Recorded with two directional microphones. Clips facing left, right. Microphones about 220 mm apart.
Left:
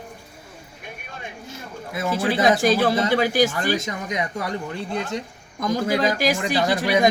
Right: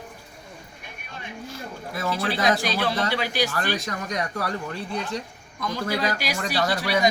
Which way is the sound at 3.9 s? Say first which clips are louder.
Left 2 dB; 20° left (ahead or behind).